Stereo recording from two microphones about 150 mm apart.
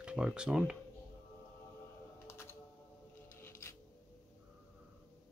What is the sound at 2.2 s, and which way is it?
Music, 20° left (ahead or behind).